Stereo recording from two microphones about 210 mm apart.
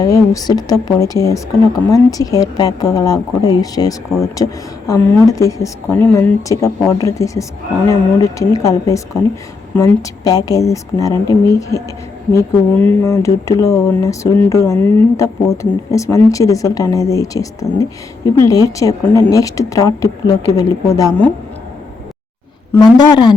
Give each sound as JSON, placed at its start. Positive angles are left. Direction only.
{"t": 0.0, "sound": "speech", "side_deg": 15}
{"t": 22.7, "sound": "a woman's voice", "side_deg": 20}